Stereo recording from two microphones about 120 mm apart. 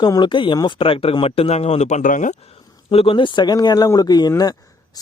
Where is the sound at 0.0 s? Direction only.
40° left (ahead or behind); by 2.3 s 90° left.